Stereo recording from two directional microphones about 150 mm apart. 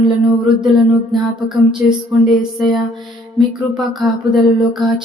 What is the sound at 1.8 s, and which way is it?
Speech, 15° right (ahead or behind).